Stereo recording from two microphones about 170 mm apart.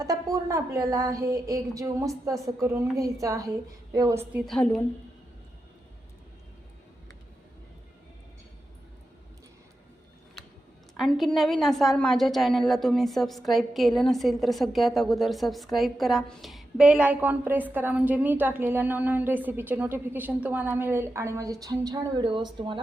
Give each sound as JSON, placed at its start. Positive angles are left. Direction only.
{"t": 0.0, "sound": "a woman's voice", "side_deg": -20}
{"t": 4.4, "sound": "a woman's voice", "side_deg": 5}
{"t": 10.9, "sound": "a woman's voice", "side_deg": 0}